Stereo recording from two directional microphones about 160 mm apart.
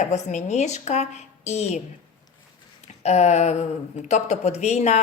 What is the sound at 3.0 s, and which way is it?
A woman's voice, 45° left (ahead or behind).